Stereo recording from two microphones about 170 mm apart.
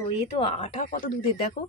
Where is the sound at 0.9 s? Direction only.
55° left (ahead or behind).